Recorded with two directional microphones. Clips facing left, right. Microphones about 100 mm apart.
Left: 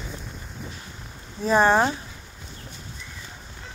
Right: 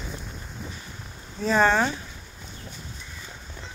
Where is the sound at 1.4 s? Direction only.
35° left (ahead or behind).